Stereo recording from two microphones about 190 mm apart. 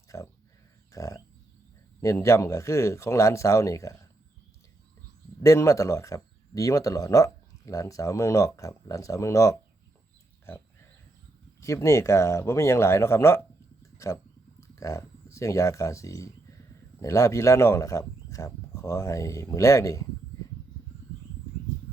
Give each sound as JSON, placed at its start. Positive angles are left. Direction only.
{"t": 0.1, "sound": "a sound", "side_deg": 15}
{"t": 2.0, "sound": "speech", "side_deg": 15}
{"t": 5.4, "sound": "speech", "side_deg": 15}
{"t": 11.6, "sound": "speech", "side_deg": 15}